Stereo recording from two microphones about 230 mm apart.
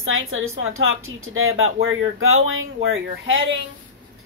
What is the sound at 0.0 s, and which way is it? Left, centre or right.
Speech, right.